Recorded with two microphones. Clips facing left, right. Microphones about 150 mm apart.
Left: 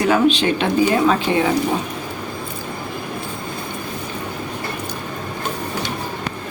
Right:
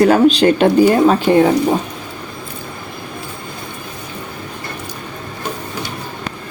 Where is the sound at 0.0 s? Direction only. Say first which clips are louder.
Right 6 dB; 40° right (ahead or behind).